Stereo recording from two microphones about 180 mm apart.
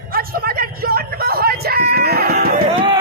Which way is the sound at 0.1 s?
55° right (ahead or behind).